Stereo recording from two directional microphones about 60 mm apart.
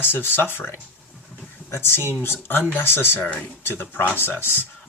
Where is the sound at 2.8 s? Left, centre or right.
Left.